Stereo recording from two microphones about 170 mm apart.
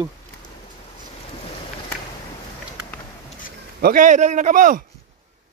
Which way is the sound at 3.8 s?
55° right (ahead or behind).